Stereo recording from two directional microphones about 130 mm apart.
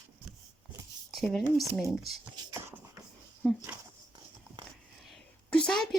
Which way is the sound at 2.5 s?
20° right (ahead or behind).